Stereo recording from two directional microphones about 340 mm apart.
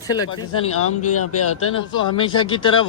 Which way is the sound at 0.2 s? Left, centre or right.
Left.